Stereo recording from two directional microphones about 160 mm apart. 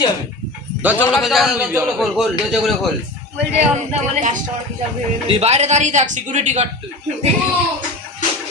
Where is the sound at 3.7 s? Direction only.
50° right (ahead or behind).